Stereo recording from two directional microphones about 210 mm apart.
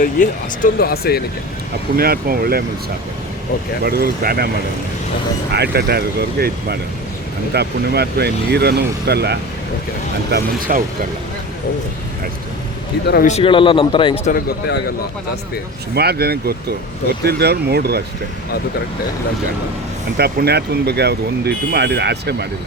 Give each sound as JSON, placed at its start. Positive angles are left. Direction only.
{"t": 0.0, "sound": "speech", "side_deg": 40}
{"t": 2.0, "sound": "speech", "side_deg": -45}
{"t": 3.8, "sound": "speech", "side_deg": -45}
{"t": 5.5, "sound": "speech", "side_deg": -50}
{"t": 13.2, "sound": "a man's voice", "side_deg": 30}
{"t": 14.3, "sound": "speech", "side_deg": 45}
{"t": 16.0, "sound": "speech", "side_deg": -50}
{"t": 20.1, "sound": "speech", "side_deg": -50}